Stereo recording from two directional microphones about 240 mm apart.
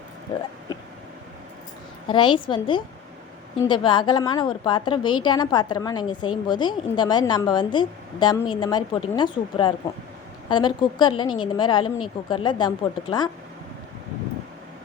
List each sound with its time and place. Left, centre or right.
2.0 s a woman's voice: centre